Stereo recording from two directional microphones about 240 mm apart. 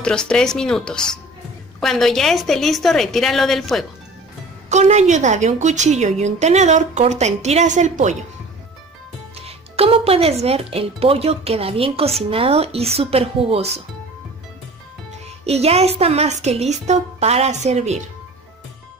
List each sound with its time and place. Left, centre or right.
0.0 s a woman's voice: centre
4.6 s speech: right
9.8 s speech: right
15.4 s speech: right